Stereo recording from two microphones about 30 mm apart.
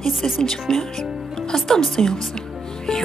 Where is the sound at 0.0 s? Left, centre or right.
Centre.